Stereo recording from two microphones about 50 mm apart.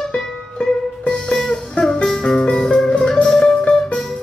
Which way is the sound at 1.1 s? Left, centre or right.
Centre.